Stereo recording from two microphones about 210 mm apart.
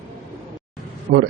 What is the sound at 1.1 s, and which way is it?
Speech, 55° right (ahead or behind).